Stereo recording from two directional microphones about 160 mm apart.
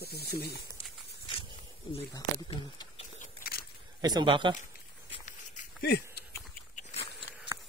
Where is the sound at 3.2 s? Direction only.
65° left (ahead or behind).